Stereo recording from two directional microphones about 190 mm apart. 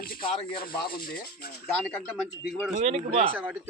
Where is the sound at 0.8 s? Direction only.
50° left (ahead or behind).